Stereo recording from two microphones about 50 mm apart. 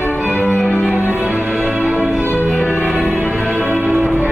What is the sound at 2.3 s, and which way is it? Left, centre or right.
Music, left.